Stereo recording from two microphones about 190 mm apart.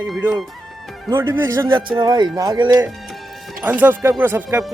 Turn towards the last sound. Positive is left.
turn(degrees=-10)  # may be behind; listen again after turning